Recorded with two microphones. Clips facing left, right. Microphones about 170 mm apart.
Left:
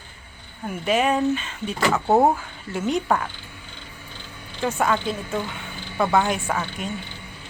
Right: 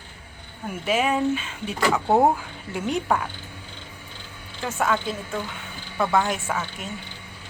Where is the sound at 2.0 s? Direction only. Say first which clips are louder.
Left 1 dB; 5° left (ahead or behind).